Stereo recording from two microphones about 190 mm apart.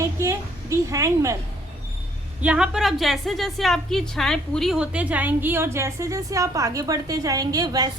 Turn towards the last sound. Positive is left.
turn(degrees=-20)  # may be behind; listen again after turning